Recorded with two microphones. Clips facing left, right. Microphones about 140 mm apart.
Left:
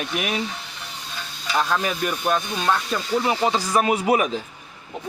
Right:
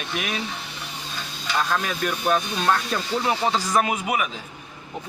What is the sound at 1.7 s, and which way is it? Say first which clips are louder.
Speech: left 2 dB; 15° left (ahead or behind).